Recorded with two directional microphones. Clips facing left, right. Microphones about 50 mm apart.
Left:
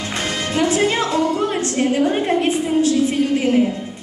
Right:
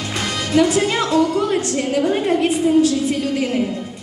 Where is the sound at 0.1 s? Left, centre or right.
Left.